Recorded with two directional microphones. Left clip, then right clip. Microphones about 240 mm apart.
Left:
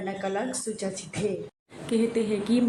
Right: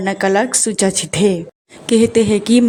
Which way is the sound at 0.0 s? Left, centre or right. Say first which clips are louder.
Right 15 dB; right.